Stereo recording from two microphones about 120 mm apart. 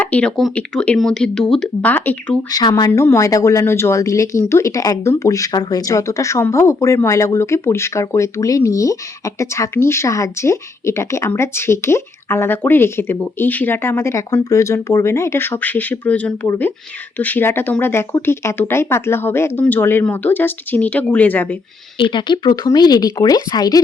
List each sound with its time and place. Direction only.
0.0 s speech: 10° left (ahead or behind)
2.5 s speech: 35° left (ahead or behind); by 21.6 s 15° left (ahead or behind)
21.9 s speech: 40° left (ahead or behind)